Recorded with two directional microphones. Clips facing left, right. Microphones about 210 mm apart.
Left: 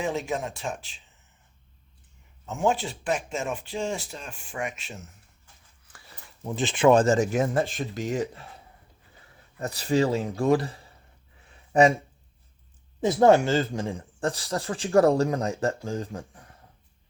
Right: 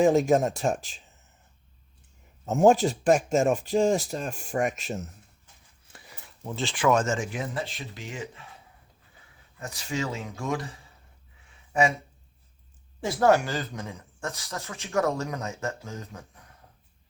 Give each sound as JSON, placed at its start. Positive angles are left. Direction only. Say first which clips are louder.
{"t": 0.0, "sound": "speech", "louder": "right 9 dB", "side_deg": -45}
{"t": 2.5, "sound": "speech", "louder": "right 6 dB", "side_deg": -45}
{"t": 5.9, "sound": "a sound", "louder": "right 2 dB", "side_deg": -20}
{"t": 6.4, "sound": "speech", "louder": "left 5 dB", "side_deg": 15}
{"t": 9.6, "sound": "speech", "louder": "left 8 dB", "side_deg": 35}
{"t": 13.0, "sound": "speech", "louder": "left 4 dB", "side_deg": 20}